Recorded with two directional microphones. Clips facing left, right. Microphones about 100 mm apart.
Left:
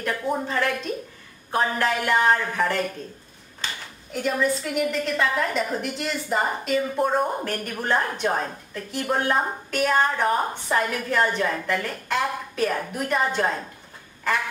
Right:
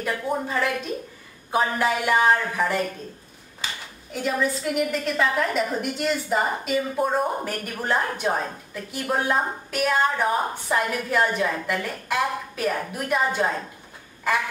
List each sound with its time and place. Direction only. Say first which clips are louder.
0.0 s a woman's voice: even; 5° right (ahead or behind)
4.1 s a woman's voice: left 1 dB; centre (ahead or behind)